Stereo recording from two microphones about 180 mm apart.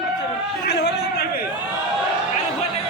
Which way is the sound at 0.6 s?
65° left (ahead or behind).